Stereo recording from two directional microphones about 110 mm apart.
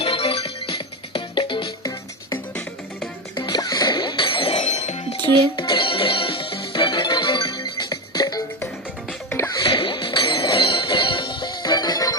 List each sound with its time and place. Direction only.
0.0 s music: 55° left (ahead or behind)
3.4 s music: 40° left (ahead or behind); by 5.1 s 75° left (ahead or behind)
5.5 s music: 45° left (ahead or behind)
9.5 s music: 45° left (ahead or behind)